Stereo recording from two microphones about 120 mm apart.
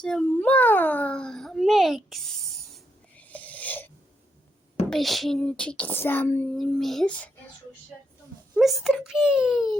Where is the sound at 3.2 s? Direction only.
15° left (ahead or behind).